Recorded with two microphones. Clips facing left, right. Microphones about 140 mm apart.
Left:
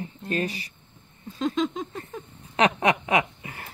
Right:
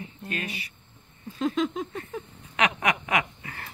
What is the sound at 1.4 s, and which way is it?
Speech, 5° right (ahead or behind).